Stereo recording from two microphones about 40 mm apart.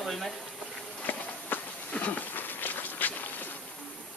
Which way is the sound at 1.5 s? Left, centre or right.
Left.